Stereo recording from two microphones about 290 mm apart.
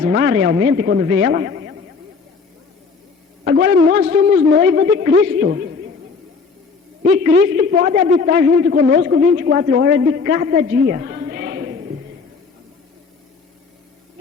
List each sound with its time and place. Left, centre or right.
0.1 s a man's voice: right
3.4 s a man's voice: right
7.5 s a man's voice: right